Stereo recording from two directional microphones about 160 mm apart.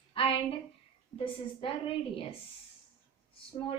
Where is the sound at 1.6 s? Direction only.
35° left (ahead or behind).